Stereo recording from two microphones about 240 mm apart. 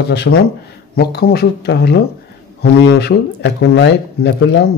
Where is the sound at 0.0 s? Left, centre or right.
Left.